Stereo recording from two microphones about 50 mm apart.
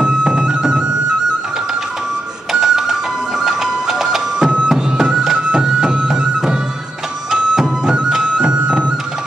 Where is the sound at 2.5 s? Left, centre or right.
Centre.